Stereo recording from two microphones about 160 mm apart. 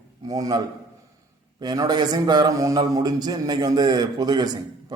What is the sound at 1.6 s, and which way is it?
A man's voice, 25° right (ahead or behind).